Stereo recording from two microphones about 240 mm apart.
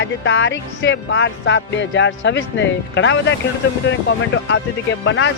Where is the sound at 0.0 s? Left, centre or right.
Left.